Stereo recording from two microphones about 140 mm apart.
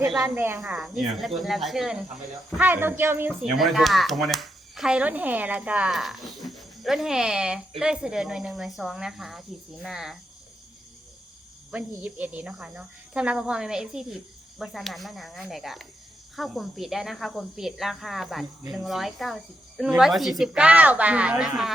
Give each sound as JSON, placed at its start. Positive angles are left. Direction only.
{"t": 0.2, "sound": "speech", "side_deg": -15}
{"t": 0.6, "sound": "speech", "side_deg": -5}
{"t": 2.6, "sound": "speech", "side_deg": -15}
{"t": 3.4, "sound": "speech", "side_deg": 0}
{"t": 11.7, "sound": "speech", "side_deg": -10}